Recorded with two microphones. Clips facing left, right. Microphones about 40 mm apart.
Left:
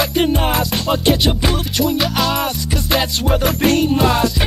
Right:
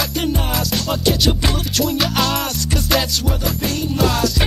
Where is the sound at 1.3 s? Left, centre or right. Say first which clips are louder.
Left 2 dB; centre.